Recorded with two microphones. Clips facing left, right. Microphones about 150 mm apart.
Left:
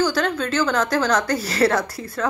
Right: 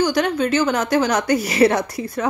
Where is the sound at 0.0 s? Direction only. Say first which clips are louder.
Right 3 dB; 15° right (ahead or behind).